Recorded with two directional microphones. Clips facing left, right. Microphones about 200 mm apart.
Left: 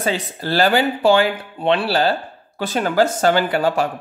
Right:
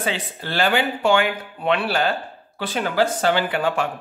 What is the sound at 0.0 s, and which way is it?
Speech, 40° left (ahead or behind).